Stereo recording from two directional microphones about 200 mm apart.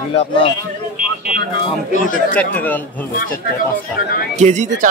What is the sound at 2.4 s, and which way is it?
Speech, 10° left (ahead or behind).